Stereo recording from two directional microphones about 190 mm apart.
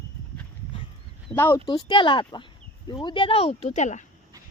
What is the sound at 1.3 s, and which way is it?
Speech, 10° left (ahead or behind).